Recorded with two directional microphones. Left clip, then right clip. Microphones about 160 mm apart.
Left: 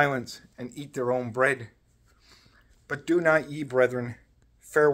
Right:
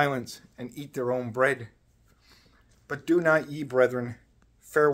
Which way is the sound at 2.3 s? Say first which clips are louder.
Left 2 dB; centre (ahead or behind).